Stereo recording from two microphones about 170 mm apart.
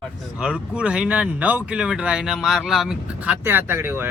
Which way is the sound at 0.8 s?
5° right (ahead or behind).